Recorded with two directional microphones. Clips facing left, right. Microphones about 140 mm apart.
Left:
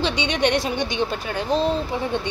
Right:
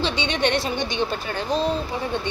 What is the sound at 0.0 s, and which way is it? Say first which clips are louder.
A woman's voice: left 1 dB; 15° left (ahead or behind).